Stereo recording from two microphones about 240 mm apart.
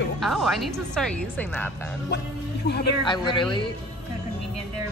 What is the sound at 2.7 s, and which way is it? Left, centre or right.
Speech, left.